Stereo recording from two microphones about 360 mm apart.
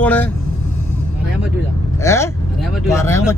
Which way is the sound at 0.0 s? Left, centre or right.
Centre.